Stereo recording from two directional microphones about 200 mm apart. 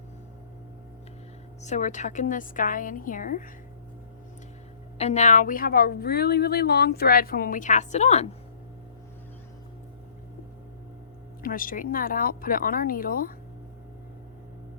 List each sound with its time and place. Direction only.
1.6 s a woman's voice: 35° left (ahead or behind)
4.9 s a woman's voice: 35° left (ahead or behind)
11.4 s a woman's voice: 45° left (ahead or behind)